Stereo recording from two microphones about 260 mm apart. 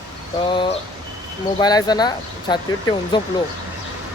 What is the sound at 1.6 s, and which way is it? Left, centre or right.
Speech, centre.